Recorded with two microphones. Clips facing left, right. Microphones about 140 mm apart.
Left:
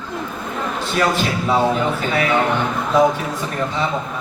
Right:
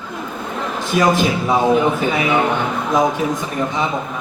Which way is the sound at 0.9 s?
15° right (ahead or behind).